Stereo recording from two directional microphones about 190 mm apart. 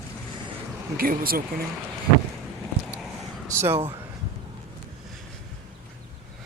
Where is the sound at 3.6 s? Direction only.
30° right (ahead or behind).